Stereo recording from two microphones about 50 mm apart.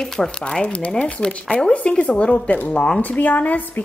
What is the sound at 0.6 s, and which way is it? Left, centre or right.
Speech, left.